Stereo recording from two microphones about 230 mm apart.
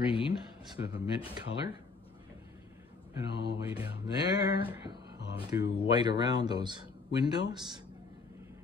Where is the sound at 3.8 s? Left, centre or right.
Centre.